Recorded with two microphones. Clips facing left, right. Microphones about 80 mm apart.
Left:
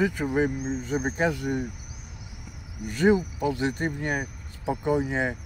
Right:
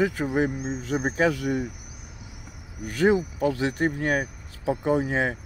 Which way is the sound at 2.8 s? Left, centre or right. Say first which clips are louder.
Even; right.